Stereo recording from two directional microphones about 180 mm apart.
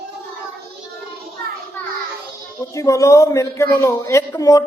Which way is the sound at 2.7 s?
15° left (ahead or behind).